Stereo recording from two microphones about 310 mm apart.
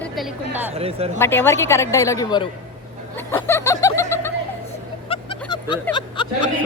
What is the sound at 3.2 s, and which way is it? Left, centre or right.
Snicker, centre.